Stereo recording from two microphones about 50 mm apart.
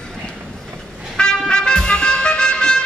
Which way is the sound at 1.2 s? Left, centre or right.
Centre.